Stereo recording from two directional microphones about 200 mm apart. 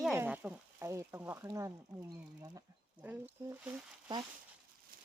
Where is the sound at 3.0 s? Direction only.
10° right (ahead or behind).